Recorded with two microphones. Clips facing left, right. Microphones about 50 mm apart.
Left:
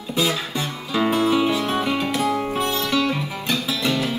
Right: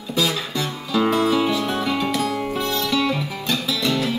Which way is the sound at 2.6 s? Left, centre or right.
Left.